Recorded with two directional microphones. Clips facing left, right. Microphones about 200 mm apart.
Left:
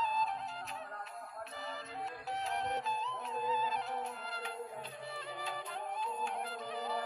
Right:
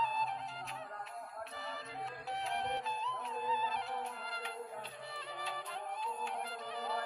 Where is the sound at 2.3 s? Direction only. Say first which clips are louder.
Left 1 dB; 40° left (ahead or behind).